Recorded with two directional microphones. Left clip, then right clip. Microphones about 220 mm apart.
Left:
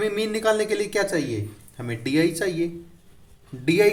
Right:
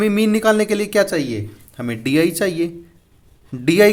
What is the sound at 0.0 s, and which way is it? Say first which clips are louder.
Speech: right 6 dB; 40° right (ahead or behind).